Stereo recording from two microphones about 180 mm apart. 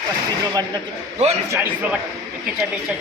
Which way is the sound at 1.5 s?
10° right (ahead or behind).